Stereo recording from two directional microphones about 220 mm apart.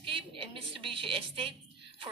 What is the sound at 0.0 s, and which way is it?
A woman's voice, 25° right (ahead or behind).